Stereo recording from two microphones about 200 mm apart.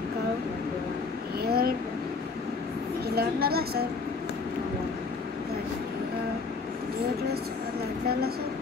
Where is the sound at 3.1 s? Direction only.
50° right (ahead or behind).